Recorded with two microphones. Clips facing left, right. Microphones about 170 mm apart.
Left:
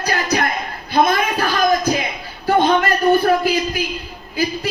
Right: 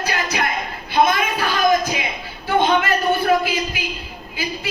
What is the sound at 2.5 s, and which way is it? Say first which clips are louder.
A woman's voice: left 2 dB; 40° left (ahead or behind).